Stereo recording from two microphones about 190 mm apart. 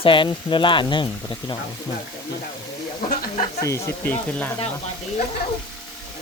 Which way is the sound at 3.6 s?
15° left (ahead or behind).